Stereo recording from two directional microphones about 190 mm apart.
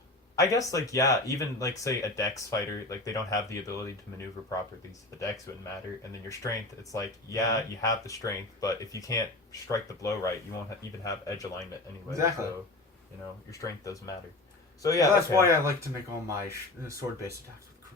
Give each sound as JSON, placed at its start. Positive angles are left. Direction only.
{"t": 0.3, "sound": "speech", "side_deg": 15}
{"t": 6.9, "sound": "speech", "side_deg": 20}
{"t": 12.1, "sound": "speech", "side_deg": -15}
{"t": 13.5, "sound": "speech", "side_deg": 15}
{"t": 15.4, "sound": "speech", "side_deg": -15}